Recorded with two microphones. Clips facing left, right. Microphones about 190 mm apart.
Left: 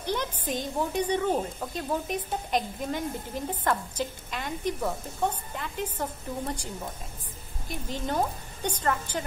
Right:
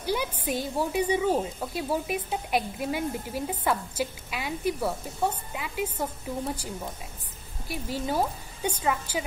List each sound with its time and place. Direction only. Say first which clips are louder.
0.0 s a woman's voice: right 2 dB; 10° right (ahead or behind)